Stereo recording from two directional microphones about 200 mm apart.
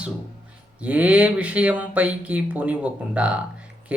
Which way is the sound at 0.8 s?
5° right (ahead or behind).